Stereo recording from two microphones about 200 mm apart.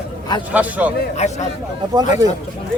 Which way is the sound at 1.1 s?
35° left (ahead or behind).